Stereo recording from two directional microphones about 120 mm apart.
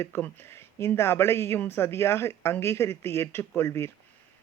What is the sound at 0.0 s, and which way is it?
Speech, 20° left (ahead or behind).